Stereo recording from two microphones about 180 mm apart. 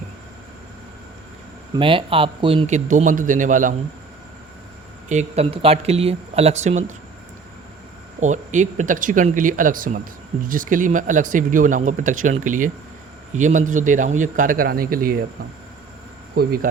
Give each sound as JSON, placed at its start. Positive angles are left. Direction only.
{"t": 1.7, "sound": "speech", "side_deg": -30}
{"t": 2.6, "sound": "speech", "side_deg": -40}
{"t": 5.0, "sound": "speech", "side_deg": -40}
{"t": 8.2, "sound": "speech", "side_deg": -40}
{"t": 16.3, "sound": "speech", "side_deg": -55}